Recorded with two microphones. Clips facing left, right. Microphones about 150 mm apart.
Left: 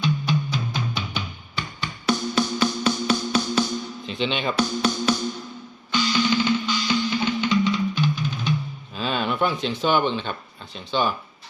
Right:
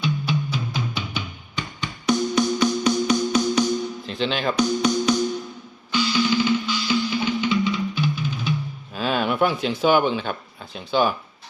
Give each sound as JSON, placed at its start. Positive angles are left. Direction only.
{"t": 0.0, "sound": "music", "side_deg": -10}
{"t": 4.0, "sound": "speech", "side_deg": 0}
{"t": 4.5, "sound": "music", "side_deg": -15}
{"t": 9.0, "sound": "speech", "side_deg": -5}